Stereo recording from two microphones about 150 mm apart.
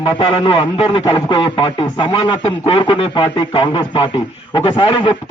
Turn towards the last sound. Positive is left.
turn(degrees=35)  # may be behind; listen again after turning